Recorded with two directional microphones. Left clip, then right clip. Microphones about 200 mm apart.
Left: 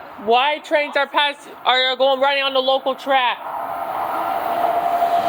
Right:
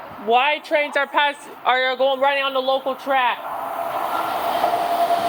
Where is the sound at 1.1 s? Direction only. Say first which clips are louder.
Left 1 dB; 5° left (ahead or behind).